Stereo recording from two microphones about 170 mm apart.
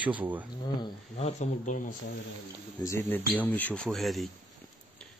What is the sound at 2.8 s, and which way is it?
Speech, 15° left (ahead or behind).